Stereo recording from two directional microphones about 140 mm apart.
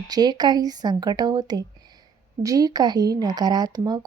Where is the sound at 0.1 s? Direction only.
30° right (ahead or behind).